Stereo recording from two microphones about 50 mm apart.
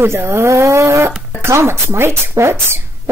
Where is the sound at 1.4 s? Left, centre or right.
Right.